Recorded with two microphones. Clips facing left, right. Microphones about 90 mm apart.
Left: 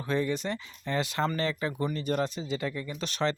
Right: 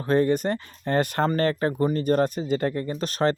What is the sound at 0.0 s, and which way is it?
Speech, 45° right (ahead or behind).